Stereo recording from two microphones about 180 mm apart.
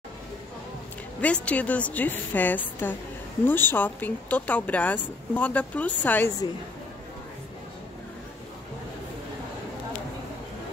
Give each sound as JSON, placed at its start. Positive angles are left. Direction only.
{"t": 1.2, "sound": "speech", "side_deg": 5}